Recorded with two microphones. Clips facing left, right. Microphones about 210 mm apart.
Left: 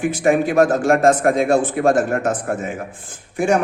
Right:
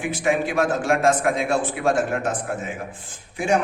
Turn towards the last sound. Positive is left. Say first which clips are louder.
# left 4 dB
turn(degrees=50)  # may be behind; listen again after turning